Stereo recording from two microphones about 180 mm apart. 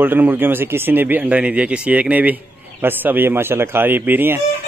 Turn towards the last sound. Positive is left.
turn(degrees=-10)  # may be behind; listen again after turning